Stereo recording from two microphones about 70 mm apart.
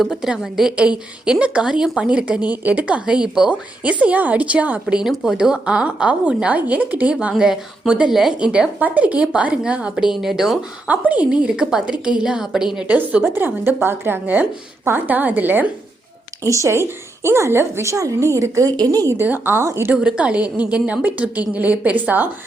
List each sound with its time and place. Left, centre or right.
0.0 s a woman's voice: centre; by 4.9 s right
4.9 s a woman's voice: centre
10.8 s a woman's voice: right; by 12.8 s centre
12.9 s a woman's voice: right
17.2 s a woman's voice: right
18.8 s a woman's voice: right
19.2 s a woman's voice: right
19.6 s a woman's voice: right
19.9 s a woman's voice: centre